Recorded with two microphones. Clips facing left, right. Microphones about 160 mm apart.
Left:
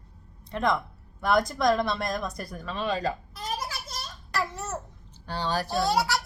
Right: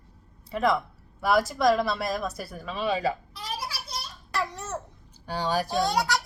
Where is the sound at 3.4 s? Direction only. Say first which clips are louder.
Left 2 dB; 45° left (ahead or behind).